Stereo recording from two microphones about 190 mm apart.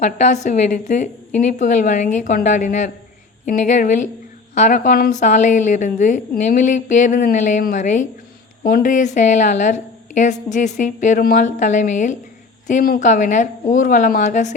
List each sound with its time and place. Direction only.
0.0 s a woman's voice: 40° left (ahead or behind)